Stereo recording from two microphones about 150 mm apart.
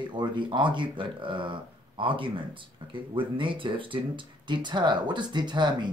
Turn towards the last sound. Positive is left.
turn(degrees=-30)  # may be behind; listen again after turning